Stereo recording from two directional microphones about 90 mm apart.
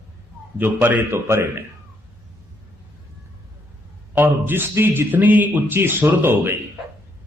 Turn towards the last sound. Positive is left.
turn(degrees=-25)  # may be behind; listen again after turning